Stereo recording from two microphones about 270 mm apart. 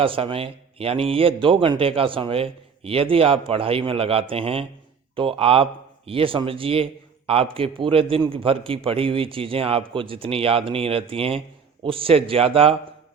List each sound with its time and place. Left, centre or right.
0.0 s a man's voice: centre